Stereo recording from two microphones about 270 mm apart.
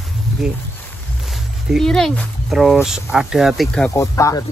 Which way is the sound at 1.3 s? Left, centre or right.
Centre.